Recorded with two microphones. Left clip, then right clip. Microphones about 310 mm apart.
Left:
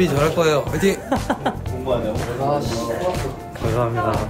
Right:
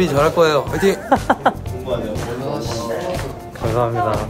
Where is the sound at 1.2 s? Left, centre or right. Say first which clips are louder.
Right 7 dB; centre.